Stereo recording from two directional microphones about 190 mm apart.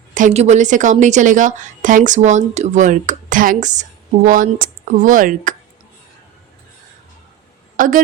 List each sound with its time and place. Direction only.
0.1 s a woman's voice: 40° right (ahead or behind)
7.8 s a woman's voice: 45° right (ahead or behind)